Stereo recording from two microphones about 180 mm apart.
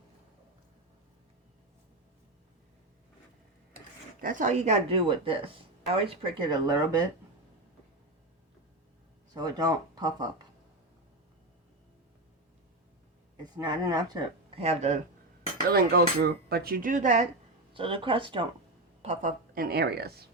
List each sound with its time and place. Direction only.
4.2 s speech: 45° right (ahead or behind); by 7.0 s 25° right (ahead or behind)
9.3 s speech: 20° right (ahead or behind)
13.4 s speech: 25° right (ahead or behind)
14.5 s speech: 35° right (ahead or behind)
15.7 s speech: 60° right (ahead or behind)
17.7 s speech: 30° right (ahead or behind)
19.0 s speech: 40° right (ahead or behind); by 20.2 s 60° right (ahead or behind)